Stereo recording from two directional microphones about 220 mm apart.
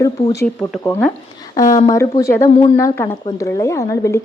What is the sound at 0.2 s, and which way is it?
Speech, 25° left (ahead or behind).